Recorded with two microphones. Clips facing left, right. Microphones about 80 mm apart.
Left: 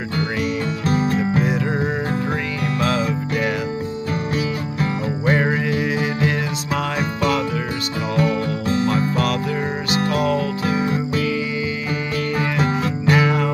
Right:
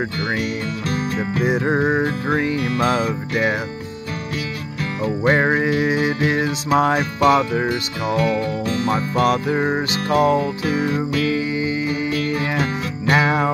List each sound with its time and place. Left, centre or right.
0.8 s music: left
1.4 s music: right
5.0 s music: right
8.2 s music: left
9.2 s music: right
10.6 s music: left
13.1 s music: right